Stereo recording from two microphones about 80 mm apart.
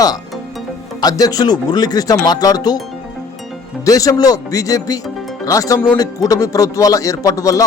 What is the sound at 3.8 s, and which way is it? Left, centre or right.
Speech, left.